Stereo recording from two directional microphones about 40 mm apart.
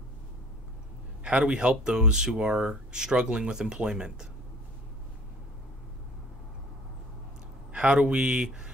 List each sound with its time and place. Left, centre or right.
1.2 s speech: right
7.7 s speech: right